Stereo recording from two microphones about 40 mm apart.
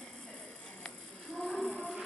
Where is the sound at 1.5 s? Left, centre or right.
Left.